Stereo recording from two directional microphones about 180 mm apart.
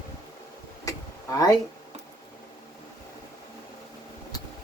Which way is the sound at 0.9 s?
20° left (ahead or behind).